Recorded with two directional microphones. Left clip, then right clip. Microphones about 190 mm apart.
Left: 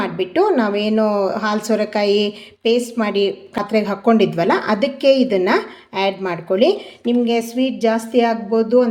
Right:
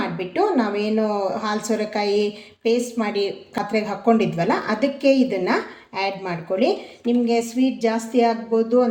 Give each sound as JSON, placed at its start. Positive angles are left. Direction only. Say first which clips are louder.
{"t": 0.0, "sound": "a woman's voice", "louder": "left 4 dB", "side_deg": 40}